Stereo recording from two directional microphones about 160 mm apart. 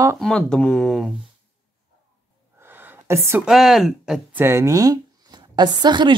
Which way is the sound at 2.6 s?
10° right (ahead or behind).